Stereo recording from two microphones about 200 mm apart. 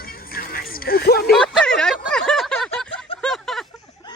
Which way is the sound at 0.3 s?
45° left (ahead or behind).